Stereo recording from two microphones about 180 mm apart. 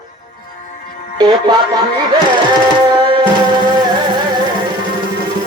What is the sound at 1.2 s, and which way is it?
Speech, 25° right (ahead or behind).